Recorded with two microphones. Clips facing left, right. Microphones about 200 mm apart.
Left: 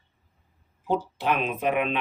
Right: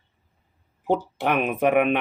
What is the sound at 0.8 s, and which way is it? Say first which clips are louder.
Speech: right 3 dB; 60° right (ahead or behind).